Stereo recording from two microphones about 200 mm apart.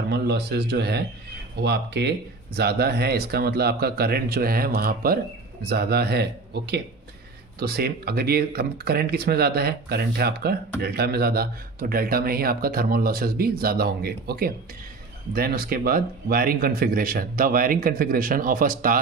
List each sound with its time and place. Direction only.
0.1 s speech: 55° right (ahead or behind)